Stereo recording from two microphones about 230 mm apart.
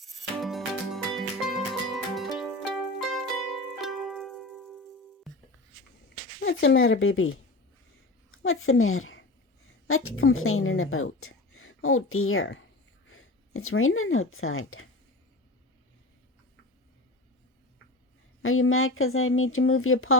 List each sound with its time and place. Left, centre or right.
0.3 s music: centre
6.4 s speech: left
8.4 s a woman's voice: left
18.4 s speech: left